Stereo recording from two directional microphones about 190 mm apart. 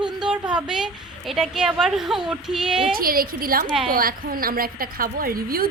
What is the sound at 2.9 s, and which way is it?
A woman's voice, 50° right (ahead or behind).